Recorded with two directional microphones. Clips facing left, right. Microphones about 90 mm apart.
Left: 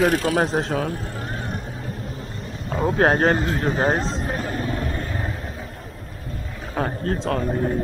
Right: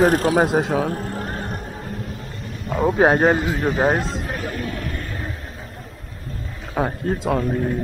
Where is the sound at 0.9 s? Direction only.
45° right (ahead or behind).